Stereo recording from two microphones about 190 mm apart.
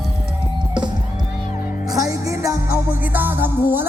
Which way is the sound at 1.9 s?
15° right (ahead or behind).